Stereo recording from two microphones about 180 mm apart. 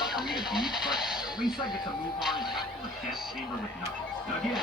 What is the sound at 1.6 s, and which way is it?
Speech, 25° left (ahead or behind).